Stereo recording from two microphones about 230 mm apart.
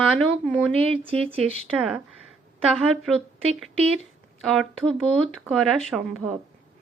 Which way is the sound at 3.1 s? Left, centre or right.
Centre.